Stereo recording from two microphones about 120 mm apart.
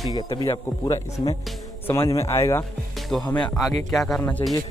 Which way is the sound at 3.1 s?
5° left (ahead or behind).